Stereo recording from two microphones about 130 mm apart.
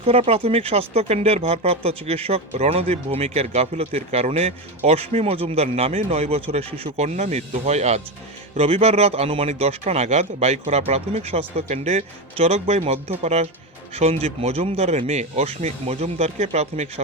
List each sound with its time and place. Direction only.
0.0 s speech: 50° right (ahead or behind)